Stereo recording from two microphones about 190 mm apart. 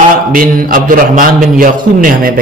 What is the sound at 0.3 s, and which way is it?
Speech, 45° right (ahead or behind).